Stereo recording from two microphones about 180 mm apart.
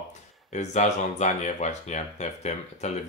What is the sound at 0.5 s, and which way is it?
Speech, 40° left (ahead or behind).